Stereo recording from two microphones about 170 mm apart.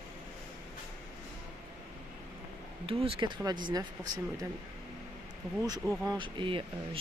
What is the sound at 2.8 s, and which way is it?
Speech, 30° right (ahead or behind).